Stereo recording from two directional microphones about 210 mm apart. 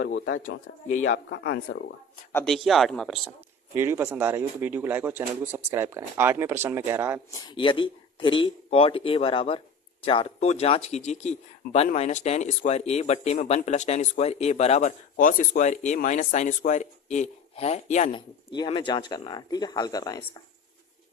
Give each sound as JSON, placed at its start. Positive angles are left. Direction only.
{"t": 0.0, "sound": "speech", "side_deg": 55}
{"t": 1.1, "sound": "speech", "side_deg": 50}
{"t": 2.3, "sound": "speech", "side_deg": 0}
{"t": 3.8, "sound": "speech", "side_deg": -10}
{"t": 7.4, "sound": "speech", "side_deg": 25}
{"t": 18.5, "sound": "speech", "side_deg": 20}